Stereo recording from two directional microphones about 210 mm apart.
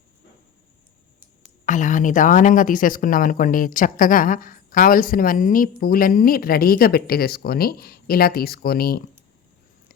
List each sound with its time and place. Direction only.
1.6 s speech: 35° left (ahead or behind)